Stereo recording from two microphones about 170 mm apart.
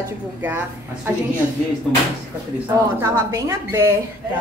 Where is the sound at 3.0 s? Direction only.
15° right (ahead or behind).